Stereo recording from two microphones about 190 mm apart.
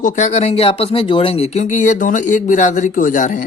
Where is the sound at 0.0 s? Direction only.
40° left (ahead or behind).